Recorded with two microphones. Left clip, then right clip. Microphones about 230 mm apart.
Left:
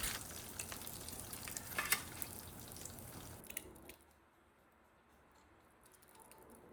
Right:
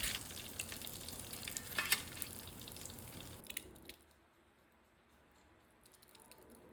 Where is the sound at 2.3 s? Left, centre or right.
Centre.